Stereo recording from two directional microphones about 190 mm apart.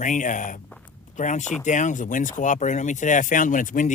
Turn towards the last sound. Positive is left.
turn(degrees=45)  # may be behind; listen again after turning